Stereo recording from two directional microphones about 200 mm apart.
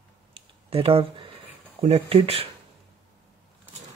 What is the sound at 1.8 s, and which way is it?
Speech, 30° right (ahead or behind).